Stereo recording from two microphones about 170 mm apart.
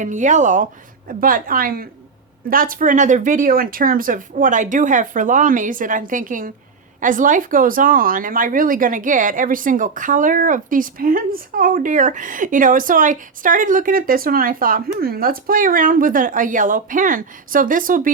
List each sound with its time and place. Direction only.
0.0 s speech: 45° right (ahead or behind)